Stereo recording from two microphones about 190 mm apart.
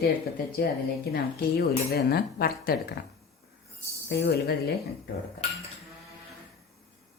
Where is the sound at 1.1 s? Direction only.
55° left (ahead or behind).